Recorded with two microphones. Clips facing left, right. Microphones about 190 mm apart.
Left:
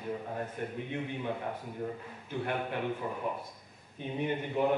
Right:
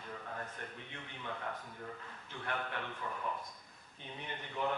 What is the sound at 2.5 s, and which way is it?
Speech, 20° left (ahead or behind).